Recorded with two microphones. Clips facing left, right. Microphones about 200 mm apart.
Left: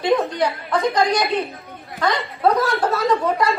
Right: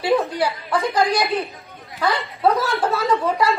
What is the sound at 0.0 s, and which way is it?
Chuckle, 10° right (ahead or behind).